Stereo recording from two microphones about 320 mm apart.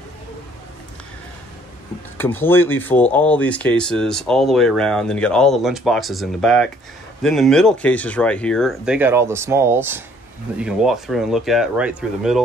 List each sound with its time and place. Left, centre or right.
2.1 s speech: centre